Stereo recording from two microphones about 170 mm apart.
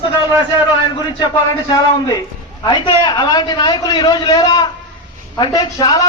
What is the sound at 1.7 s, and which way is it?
A man's voice, 25° left (ahead or behind).